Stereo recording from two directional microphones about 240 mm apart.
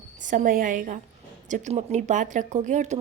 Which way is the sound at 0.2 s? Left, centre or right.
Right.